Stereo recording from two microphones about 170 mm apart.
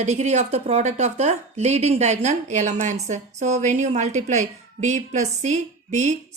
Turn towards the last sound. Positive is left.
turn(degrees=-40)  # may be behind; listen again after turning